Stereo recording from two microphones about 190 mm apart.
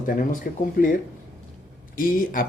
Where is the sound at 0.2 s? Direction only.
45° left (ahead or behind).